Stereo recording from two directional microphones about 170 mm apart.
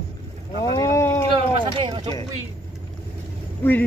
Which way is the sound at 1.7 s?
30° right (ahead or behind).